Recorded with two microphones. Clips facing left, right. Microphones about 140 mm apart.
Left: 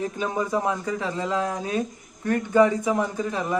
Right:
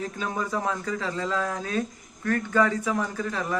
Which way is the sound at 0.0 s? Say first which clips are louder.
Left 4 dB; 20° left (ahead or behind).